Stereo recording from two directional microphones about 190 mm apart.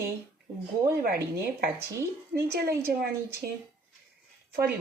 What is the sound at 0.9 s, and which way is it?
A woman's voice, 55° right (ahead or behind).